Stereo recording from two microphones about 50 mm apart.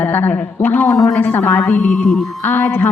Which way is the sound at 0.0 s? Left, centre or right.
Left.